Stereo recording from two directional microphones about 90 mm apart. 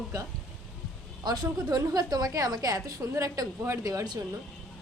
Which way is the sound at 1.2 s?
45° right (ahead or behind).